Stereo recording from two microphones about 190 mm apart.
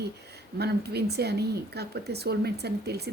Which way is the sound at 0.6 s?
60° right (ahead or behind).